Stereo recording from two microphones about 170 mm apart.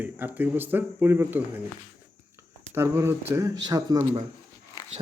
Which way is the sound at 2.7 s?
15° right (ahead or behind).